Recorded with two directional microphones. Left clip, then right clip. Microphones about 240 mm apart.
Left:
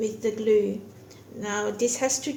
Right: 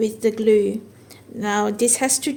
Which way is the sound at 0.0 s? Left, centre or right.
Right.